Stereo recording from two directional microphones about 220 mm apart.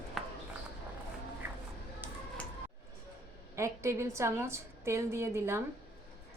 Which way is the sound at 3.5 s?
15° right (ahead or behind).